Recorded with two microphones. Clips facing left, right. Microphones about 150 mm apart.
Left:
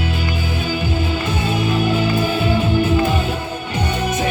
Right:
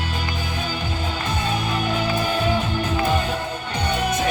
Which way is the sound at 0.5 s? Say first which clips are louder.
Left 6 dB; 5° left (ahead or behind).